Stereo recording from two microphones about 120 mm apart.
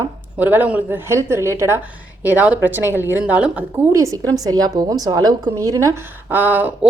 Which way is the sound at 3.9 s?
30° right (ahead or behind).